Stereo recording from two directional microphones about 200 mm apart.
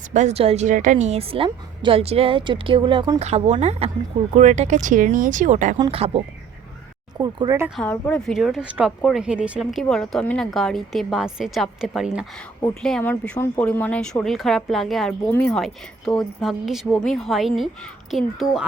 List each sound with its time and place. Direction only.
0.1 s a woman's voice: 35° right (ahead or behind)
7.2 s speech: 20° right (ahead or behind)
7.8 s speech: 5° left (ahead or behind)